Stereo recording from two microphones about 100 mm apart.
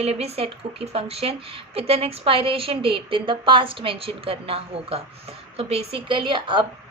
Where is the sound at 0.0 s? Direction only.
90° right.